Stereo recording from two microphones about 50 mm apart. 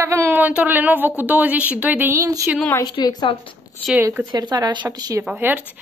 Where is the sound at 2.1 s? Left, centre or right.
Right.